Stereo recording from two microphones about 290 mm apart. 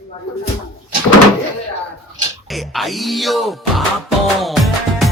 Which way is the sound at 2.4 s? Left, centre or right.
Centre.